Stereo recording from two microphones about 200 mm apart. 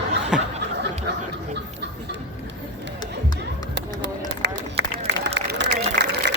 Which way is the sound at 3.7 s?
60° right (ahead or behind).